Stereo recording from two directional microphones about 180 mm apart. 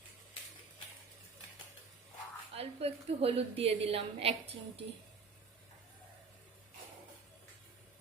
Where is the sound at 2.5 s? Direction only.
35° right (ahead or behind).